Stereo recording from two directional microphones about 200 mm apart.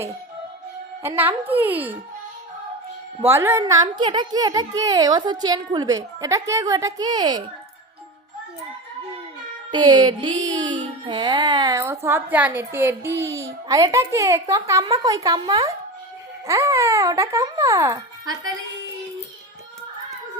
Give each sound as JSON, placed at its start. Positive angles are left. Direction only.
{"t": 1.0, "sound": "music", "side_deg": -10}
{"t": 3.2, "sound": "a woman's voice", "side_deg": -10}
{"t": 9.7, "sound": "music", "side_deg": -20}